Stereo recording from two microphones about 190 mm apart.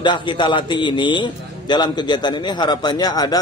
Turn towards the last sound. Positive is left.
turn(degrees=20)  # may be behind; listen again after turning